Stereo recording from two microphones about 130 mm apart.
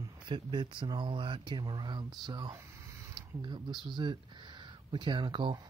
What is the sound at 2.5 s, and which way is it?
Speech, 25° right (ahead or behind).